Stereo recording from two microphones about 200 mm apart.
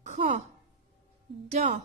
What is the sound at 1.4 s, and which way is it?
Speech, 30° right (ahead or behind).